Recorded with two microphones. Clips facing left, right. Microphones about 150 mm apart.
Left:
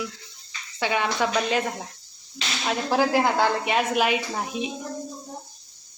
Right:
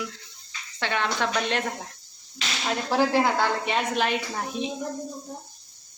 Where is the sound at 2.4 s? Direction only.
30° left (ahead or behind).